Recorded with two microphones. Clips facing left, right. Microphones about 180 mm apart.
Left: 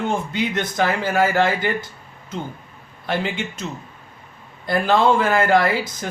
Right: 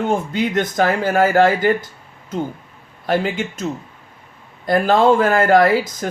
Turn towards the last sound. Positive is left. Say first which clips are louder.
# right 5 dB
turn(degrees=-40)  # may be behind; listen again after turning